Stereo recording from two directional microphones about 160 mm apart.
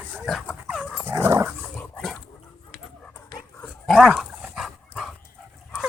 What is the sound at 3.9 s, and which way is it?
Dog, 5° right (ahead or behind).